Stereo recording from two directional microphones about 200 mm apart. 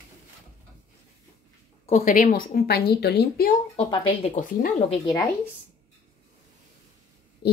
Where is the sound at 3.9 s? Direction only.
25° left (ahead or behind).